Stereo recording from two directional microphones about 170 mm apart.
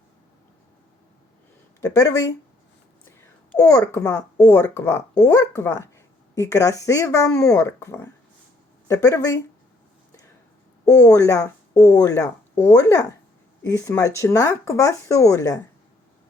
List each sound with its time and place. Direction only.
1.8 s speech: 20° left (ahead or behind)
3.6 s speech: 20° left (ahead or behind)
10.8 s speech: 20° left (ahead or behind)